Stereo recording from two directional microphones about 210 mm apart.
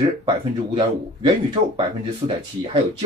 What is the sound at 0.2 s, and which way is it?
Speech, 25° right (ahead or behind).